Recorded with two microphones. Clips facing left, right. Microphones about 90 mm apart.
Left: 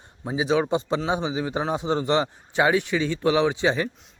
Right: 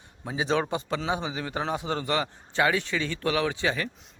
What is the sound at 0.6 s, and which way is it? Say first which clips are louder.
A man's voice: left 5 dB; 20° left (ahead or behind).